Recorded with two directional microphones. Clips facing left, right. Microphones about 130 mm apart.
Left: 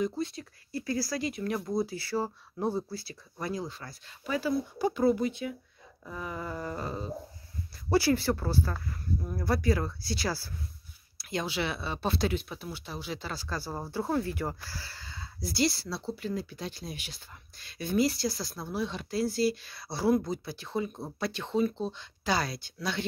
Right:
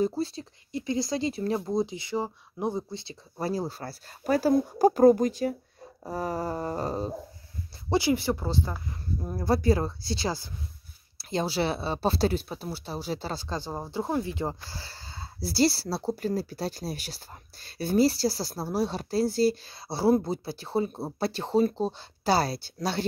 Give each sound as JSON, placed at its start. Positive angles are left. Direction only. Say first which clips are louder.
{"t": 0.0, "sound": "speech", "louder": "right 4 dB", "side_deg": -30}
{"t": 7.9, "sound": "speech", "louder": "right 1 dB", "side_deg": -15}
{"t": 9.2, "sound": "speech", "louder": "right 5 dB", "side_deg": -30}